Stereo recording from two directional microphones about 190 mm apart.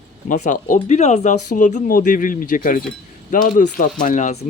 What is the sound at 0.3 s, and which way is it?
Speech, 40° left (ahead or behind).